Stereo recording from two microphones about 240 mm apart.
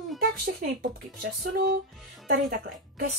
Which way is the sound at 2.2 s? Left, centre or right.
Right.